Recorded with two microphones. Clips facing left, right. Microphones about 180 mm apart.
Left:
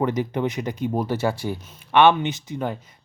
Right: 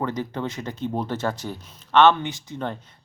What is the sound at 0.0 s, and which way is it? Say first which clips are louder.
Speech: left 5 dB; 15° left (ahead or behind).